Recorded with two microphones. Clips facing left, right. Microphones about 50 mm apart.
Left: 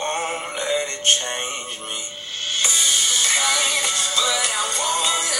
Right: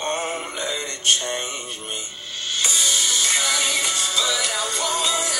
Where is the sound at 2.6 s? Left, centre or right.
Left.